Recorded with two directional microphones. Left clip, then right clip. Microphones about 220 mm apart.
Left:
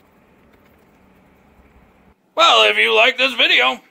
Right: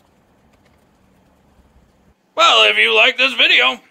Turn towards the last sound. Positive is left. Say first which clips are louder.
# right 2 dB
turn(degrees=5)  # may be behind; listen again after turning